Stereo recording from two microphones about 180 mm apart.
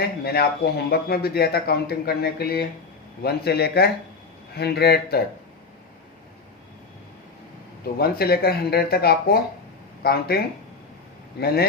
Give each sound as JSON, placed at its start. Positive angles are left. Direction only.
{"t": 0.0, "sound": "a man's voice", "side_deg": 60}
{"t": 7.9, "sound": "a man's voice", "side_deg": 60}